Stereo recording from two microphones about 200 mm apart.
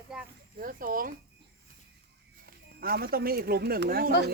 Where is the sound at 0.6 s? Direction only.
45° right (ahead or behind).